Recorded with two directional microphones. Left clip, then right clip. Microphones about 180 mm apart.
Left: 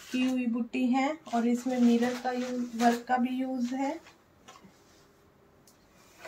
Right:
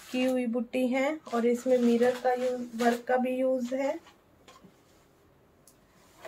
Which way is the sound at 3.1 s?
45° right (ahead or behind).